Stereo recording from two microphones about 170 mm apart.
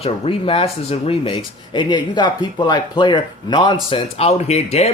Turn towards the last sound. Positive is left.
turn(degrees=40)  # may be behind; listen again after turning